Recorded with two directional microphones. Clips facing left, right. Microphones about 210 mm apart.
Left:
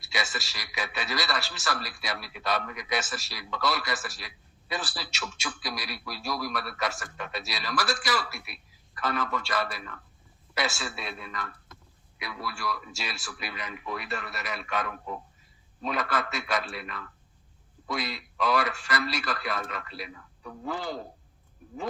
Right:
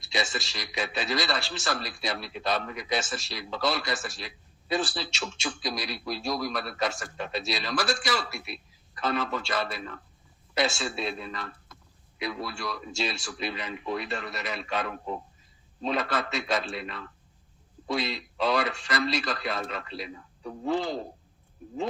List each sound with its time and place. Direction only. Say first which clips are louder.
0.1 s a man's voice: right 3 dB; 25° right (ahead or behind)